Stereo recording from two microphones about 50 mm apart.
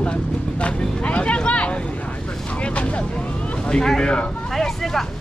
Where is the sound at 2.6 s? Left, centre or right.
Left.